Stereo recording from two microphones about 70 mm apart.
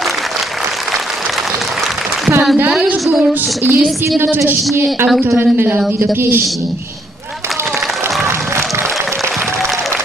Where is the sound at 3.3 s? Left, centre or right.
Right.